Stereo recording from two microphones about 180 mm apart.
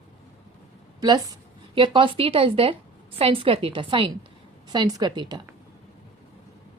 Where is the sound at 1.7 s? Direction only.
30° right (ahead or behind).